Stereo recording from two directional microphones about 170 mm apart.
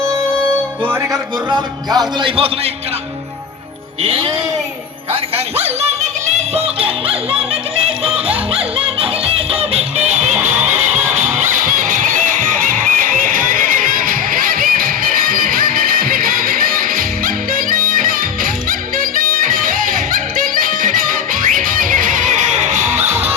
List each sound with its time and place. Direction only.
0.9 s a man's voice: 25° right (ahead or behind)
4.0 s speech: 30° right (ahead or behind)
5.5 s speech: 40° right (ahead or behind)
6.5 s yodeling: 35° right (ahead or behind)
8.0 s music: 35° right (ahead or behind)